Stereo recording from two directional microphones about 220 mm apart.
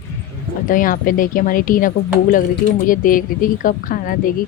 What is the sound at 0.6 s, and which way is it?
Speech, 40° left (ahead or behind).